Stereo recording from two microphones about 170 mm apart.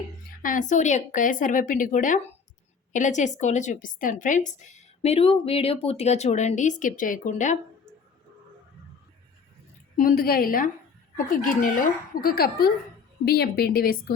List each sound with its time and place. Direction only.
0.4 s a woman's voice: 50° left (ahead or behind)
10.0 s speech: 60° left (ahead or behind)